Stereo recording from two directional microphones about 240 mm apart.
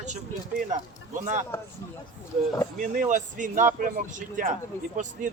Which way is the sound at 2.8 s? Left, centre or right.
Right.